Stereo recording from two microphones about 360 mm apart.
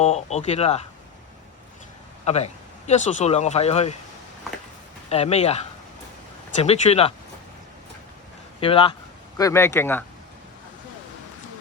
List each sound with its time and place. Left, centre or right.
0.0 s speech: centre
2.2 s speech: centre
5.0 s speech: centre
6.6 s speech: centre
8.6 s speech: centre